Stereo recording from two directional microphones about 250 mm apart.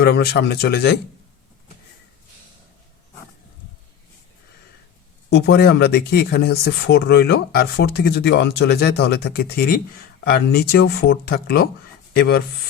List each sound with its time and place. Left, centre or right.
0.0 s speech: left
5.3 s speech: left